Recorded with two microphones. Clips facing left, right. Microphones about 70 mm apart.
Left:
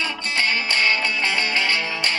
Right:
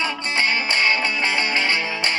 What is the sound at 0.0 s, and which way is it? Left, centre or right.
Music, right.